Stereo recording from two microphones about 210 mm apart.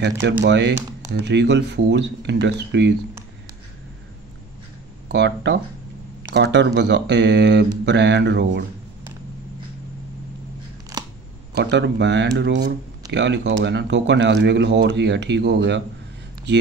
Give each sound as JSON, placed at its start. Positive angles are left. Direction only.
{"t": 0.0, "sound": "speech", "side_deg": -50}
{"t": 5.0, "sound": "speech", "side_deg": -55}
{"t": 10.9, "sound": "scissors", "side_deg": -20}
{"t": 11.5, "sound": "speech", "side_deg": -55}